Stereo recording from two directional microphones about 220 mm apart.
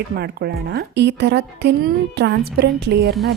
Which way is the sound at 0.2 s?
45° right (ahead or behind).